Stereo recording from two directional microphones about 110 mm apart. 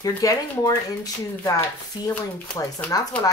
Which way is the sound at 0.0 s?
30° left (ahead or behind).